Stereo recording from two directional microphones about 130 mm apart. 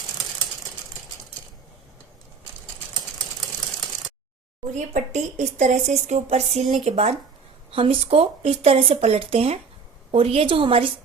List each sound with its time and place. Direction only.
4.7 s speech: 60° right (ahead or behind); by 10.9 s 45° right (ahead or behind)